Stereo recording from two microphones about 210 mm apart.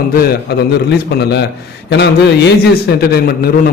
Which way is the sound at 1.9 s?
55° left (ahead or behind).